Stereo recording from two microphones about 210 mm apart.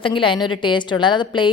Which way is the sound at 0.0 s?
25° left (ahead or behind).